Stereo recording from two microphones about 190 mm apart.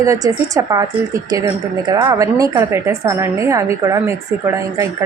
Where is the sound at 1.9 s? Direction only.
20° right (ahead or behind).